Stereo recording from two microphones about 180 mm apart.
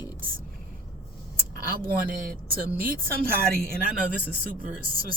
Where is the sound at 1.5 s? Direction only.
50° right (ahead or behind).